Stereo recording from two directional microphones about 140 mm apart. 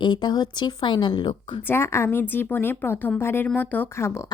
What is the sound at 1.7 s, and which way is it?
A woman's voice, 15° left (ahead or behind).